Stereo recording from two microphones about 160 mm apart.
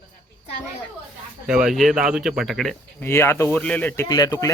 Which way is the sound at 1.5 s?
5° right (ahead or behind).